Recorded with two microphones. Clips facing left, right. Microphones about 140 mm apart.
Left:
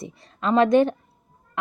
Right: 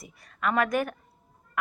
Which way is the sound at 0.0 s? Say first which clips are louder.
Left 3 dB; 25° left (ahead or behind).